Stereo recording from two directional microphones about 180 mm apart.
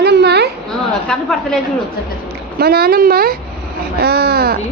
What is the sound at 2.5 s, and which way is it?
A woman's voice, 60° right (ahead or behind).